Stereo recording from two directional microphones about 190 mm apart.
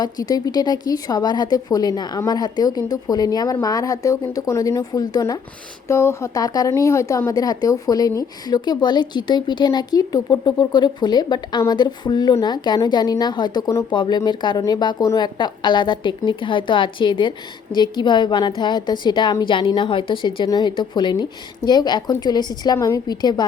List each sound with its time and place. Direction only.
0.0 s a woman's voice: 20° left (ahead or behind)